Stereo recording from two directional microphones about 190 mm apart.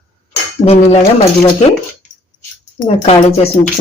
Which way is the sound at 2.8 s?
35° left (ahead or behind).